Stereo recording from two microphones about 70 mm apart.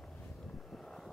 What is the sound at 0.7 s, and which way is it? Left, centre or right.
Vehicle, centre.